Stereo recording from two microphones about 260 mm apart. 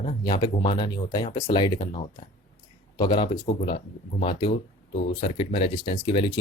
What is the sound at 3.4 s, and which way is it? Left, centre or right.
Speech, left.